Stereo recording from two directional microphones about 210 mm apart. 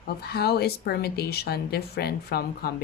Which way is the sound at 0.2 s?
50° left (ahead or behind).